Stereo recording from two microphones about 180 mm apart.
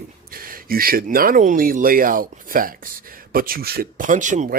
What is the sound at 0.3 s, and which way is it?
Speech, 55° right (ahead or behind).